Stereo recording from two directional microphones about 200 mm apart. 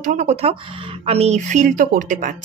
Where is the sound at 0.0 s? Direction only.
40° right (ahead or behind).